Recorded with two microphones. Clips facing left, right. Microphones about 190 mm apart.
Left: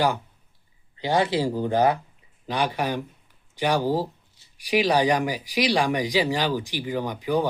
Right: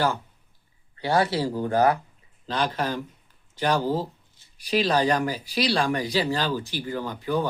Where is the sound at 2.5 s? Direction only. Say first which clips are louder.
Left 1 dB; 15° left (ahead or behind).